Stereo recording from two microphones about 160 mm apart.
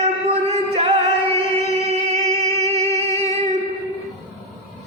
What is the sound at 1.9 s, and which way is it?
Music, 40° right (ahead or behind).